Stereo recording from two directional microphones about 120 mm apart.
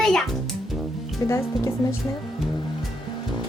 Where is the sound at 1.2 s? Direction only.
25° left (ahead or behind).